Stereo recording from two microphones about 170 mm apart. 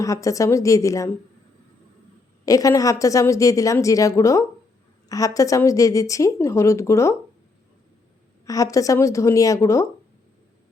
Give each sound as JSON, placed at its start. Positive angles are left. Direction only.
{"t": 0.0, "sound": "a woman's voice", "side_deg": 20}
{"t": 2.4, "sound": "a woman's voice", "side_deg": 20}
{"t": 8.4, "sound": "a woman's voice", "side_deg": 20}